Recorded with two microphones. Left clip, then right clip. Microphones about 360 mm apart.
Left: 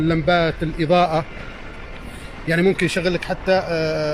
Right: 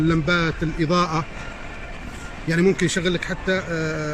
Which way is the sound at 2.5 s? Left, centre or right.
Centre.